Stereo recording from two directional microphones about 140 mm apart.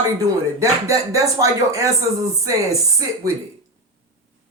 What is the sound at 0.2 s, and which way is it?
Speech, 25° right (ahead or behind).